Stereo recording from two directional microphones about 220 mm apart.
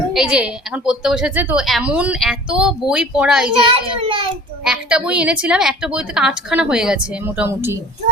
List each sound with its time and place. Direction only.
0.1 s a woman's voice: 5° right (ahead or behind)
3.9 s a child's voice: 25° right (ahead or behind)
4.6 s a woman's voice: 5° right (ahead or behind)